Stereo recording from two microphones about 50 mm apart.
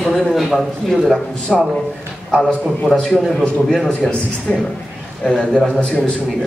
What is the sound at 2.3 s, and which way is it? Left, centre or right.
Speech, centre.